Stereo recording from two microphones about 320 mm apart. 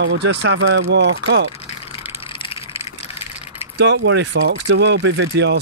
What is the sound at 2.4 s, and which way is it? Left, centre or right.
Vehicle, centre.